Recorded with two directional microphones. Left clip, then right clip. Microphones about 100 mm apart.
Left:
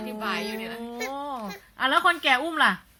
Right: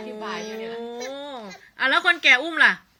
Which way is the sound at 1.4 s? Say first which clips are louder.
Right 5 dB; 40° left (ahead or behind).